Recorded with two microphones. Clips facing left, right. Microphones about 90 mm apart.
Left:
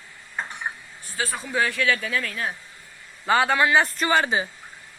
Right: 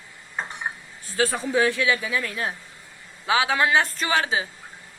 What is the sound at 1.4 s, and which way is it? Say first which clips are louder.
Speech: left 1 dB; 25° right (ahead or behind).